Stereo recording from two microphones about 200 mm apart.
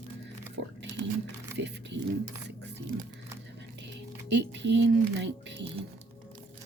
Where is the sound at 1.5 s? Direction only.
60° right (ahead or behind).